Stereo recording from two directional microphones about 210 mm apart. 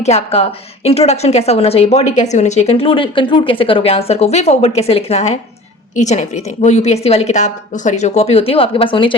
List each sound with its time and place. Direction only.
0.0 s a woman's voice: 30° left (ahead or behind)